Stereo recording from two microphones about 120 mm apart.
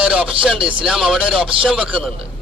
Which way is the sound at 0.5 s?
45° right (ahead or behind).